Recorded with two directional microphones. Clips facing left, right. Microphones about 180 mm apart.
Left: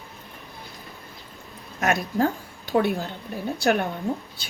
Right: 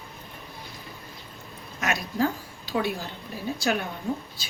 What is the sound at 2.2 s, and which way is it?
A woman's voice, 55° left (ahead or behind).